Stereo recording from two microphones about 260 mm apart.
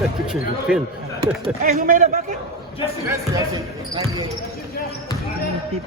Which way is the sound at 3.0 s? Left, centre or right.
Centre.